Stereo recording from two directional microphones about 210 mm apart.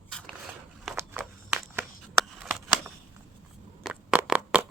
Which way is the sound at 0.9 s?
Centre (ahead or behind).